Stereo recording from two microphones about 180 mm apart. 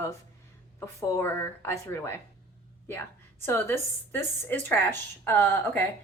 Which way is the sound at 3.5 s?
10° left (ahead or behind).